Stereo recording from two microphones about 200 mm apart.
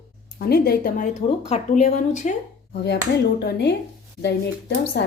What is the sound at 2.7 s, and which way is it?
Speech, 55° left (ahead or behind).